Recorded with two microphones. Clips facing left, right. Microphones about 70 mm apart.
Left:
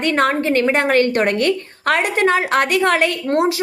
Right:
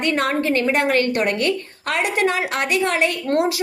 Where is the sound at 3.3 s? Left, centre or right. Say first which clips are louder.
Left 2 dB; left.